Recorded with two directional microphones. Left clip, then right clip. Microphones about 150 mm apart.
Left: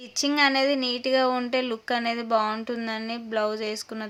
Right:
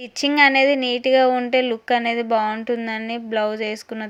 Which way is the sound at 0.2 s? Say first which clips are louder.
Right 7 dB; 25° right (ahead or behind).